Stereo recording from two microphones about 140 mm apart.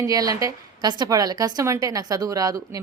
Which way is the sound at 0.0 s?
25° right (ahead or behind).